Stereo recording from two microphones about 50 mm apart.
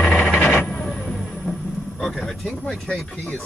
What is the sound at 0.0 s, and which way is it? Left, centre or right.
Vehicle, left.